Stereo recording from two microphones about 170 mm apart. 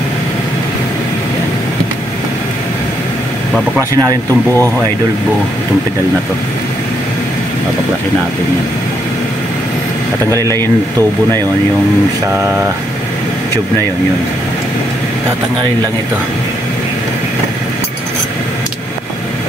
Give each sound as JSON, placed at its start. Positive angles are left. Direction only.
{"t": 3.9, "sound": "speech", "side_deg": -20}